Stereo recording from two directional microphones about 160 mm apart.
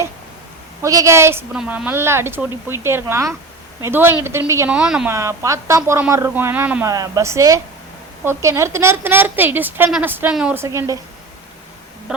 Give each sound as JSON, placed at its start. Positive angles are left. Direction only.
{"t": 0.8, "sound": "speech", "side_deg": -20}
{"t": 4.7, "sound": "speech", "side_deg": -5}
{"t": 5.1, "sound": "speech", "side_deg": -20}
{"t": 6.9, "sound": "speech", "side_deg": -20}